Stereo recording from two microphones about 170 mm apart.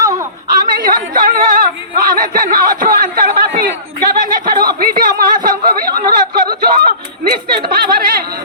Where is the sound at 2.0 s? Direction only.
55° right (ahead or behind).